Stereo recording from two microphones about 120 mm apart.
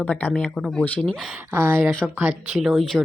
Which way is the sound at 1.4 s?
20° right (ahead or behind).